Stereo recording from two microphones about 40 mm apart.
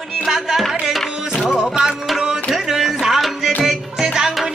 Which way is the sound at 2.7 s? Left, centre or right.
Centre.